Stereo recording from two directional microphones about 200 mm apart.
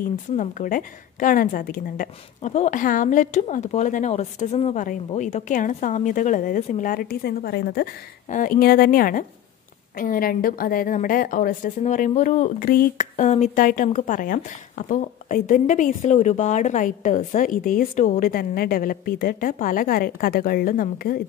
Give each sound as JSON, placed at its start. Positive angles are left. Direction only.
{"t": 0.0, "sound": "a woman's voice", "side_deg": 40}